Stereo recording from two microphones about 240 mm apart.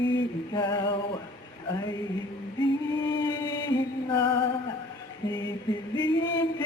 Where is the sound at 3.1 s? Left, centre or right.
Centre.